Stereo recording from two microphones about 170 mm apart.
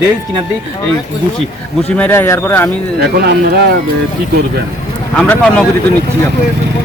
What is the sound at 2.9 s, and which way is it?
Speech, 70° right (ahead or behind).